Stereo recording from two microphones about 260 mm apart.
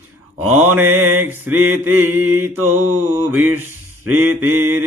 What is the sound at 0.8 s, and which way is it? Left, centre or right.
Mantra, right.